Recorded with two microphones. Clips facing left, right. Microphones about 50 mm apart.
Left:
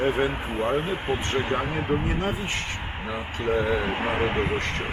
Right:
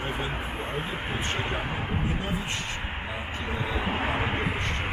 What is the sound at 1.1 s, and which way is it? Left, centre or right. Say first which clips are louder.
Speech: left 4 dB; centre.